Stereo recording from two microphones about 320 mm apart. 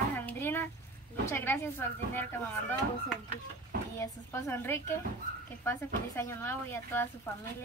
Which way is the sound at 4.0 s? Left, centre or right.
Centre.